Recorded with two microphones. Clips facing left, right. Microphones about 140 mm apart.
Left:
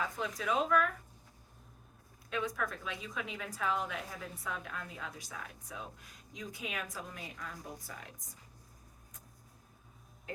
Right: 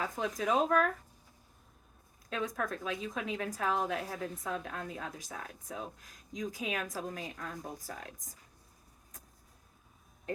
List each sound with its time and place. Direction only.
0.0 s a woman's voice: 40° right (ahead or behind)
2.3 s a woman's voice: 40° right (ahead or behind)